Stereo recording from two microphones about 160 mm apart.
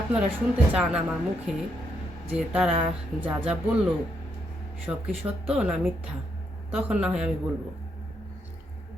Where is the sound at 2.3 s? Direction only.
5° right (ahead or behind).